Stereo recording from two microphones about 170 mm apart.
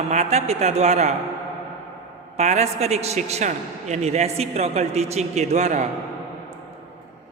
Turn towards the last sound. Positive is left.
turn(degrees=-40)  # may be behind; listen again after turning